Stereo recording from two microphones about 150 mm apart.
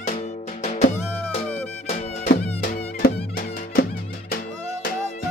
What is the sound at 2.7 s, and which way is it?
Music, 70° left (ahead or behind).